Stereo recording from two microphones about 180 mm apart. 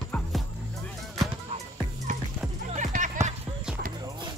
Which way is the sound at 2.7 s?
45° right (ahead or behind).